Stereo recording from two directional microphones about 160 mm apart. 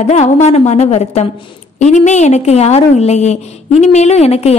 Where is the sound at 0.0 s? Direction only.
45° left (ahead or behind).